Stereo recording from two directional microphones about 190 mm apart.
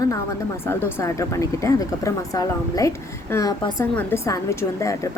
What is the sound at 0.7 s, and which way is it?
Speech, 10° left (ahead or behind).